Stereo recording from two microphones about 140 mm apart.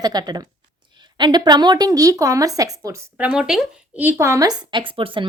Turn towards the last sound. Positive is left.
turn(degrees=-35)  # may be behind; listen again after turning